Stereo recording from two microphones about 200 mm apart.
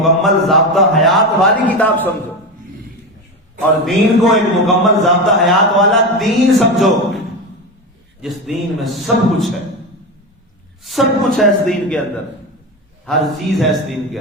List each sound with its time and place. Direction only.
0.0 s a sound: centre (ahead or behind)
3.8 s a man's voice: centre (ahead or behind)
8.2 s a man's voice: centre (ahead or behind)
10.8 s a man's voice: centre (ahead or behind)
13.1 s a man's voice: centre (ahead or behind)